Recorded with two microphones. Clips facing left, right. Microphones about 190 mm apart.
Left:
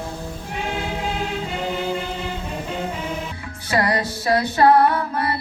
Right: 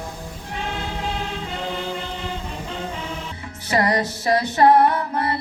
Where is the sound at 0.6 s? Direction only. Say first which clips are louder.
Left 2 dB; 15° left (ahead or behind).